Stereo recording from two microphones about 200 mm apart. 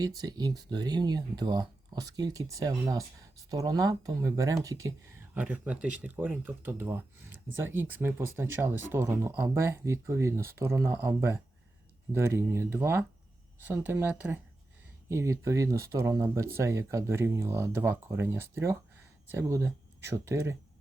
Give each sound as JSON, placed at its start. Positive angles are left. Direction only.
{"t": 0.0, "sound": "speech", "side_deg": -20}